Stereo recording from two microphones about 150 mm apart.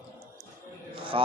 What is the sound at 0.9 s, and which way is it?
Music, 35° right (ahead or behind).